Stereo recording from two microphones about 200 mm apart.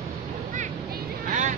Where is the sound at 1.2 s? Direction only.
40° right (ahead or behind).